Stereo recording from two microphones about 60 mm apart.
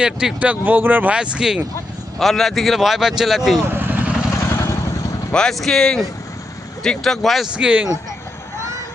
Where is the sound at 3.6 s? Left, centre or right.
Right.